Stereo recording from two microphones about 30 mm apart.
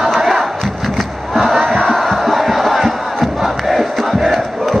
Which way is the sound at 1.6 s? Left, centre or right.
Centre.